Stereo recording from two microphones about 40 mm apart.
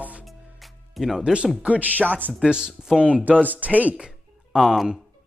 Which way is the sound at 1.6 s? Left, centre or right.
Right.